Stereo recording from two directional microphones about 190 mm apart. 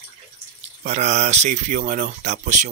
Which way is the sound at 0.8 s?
35° right (ahead or behind).